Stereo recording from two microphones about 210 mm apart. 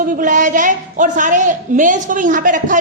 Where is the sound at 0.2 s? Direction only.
40° right (ahead or behind).